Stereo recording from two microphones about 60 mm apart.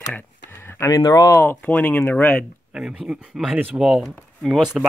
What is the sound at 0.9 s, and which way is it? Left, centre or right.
Speech, left.